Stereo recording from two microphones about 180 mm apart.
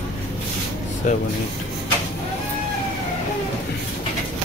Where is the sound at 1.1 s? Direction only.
45° left (ahead or behind).